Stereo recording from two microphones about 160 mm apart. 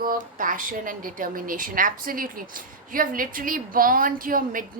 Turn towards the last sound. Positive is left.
turn(degrees=-60)  # may be behind; listen again after turning